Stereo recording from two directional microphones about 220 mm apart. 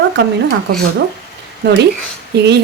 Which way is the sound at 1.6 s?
50° right (ahead or behind).